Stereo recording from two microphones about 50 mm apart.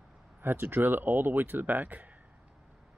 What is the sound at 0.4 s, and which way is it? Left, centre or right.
Speech, right.